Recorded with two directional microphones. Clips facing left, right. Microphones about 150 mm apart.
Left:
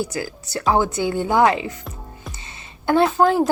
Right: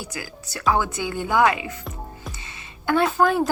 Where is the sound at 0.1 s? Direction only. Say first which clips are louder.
Left 7 dB; 40° left (ahead or behind).